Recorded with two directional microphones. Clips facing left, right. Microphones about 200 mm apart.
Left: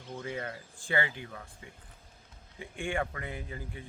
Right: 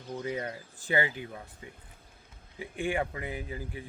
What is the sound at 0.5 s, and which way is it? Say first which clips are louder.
Speech: right 2 dB; 20° right (ahead or behind).